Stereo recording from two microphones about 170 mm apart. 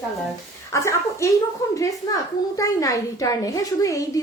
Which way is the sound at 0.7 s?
15° left (ahead or behind).